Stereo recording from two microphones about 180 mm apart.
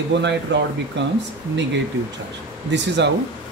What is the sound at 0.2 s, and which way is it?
Speech, 75° right (ahead or behind).